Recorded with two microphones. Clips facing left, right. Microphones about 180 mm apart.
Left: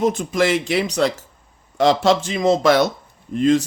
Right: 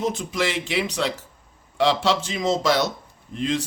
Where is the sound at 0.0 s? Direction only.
50° left (ahead or behind).